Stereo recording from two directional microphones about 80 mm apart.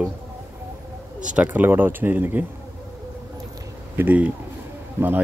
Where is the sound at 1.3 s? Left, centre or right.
Centre.